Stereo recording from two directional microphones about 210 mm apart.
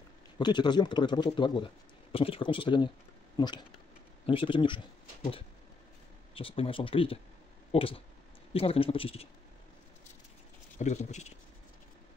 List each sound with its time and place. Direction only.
0.4 s speech: 20° left (ahead or behind)
6.3 s speech: 25° left (ahead or behind)
10.8 s speech: 35° left (ahead or behind)